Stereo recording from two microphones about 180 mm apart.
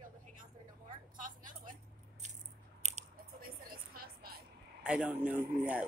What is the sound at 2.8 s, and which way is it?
Chewing, 40° right (ahead or behind).